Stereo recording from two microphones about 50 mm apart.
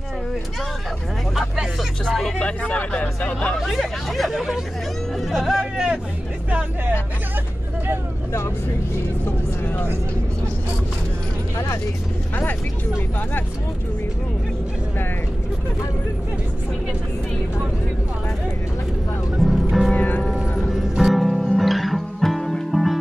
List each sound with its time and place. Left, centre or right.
2.3 s speech: left
3.5 s speech: centre
9.2 s speech: left
19.5 s music: centre
19.9 s music: left
20.7 s music: centre